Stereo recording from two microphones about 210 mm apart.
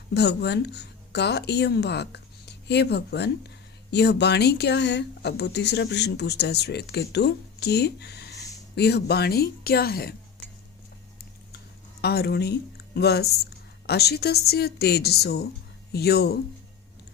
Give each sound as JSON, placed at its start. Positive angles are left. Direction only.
{"t": 0.1, "sound": "speech", "side_deg": 55}
{"t": 12.0, "sound": "speech", "side_deg": 50}